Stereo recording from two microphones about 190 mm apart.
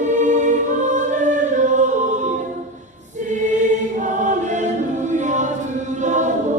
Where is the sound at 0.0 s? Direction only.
40° right (ahead or behind).